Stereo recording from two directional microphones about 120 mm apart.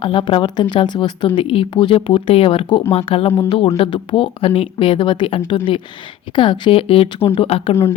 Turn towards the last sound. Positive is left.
turn(degrees=55)  # may be behind; listen again after turning